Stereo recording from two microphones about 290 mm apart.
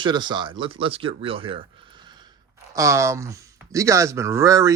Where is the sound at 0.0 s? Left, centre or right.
Centre.